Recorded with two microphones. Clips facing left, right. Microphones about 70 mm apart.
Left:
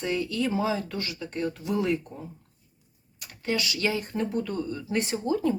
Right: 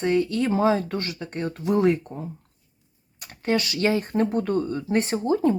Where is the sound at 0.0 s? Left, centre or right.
Right.